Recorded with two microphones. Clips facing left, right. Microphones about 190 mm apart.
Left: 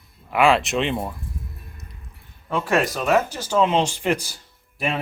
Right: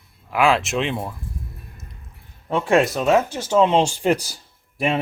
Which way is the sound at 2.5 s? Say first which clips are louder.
Right 4 dB; 30° right (ahead or behind).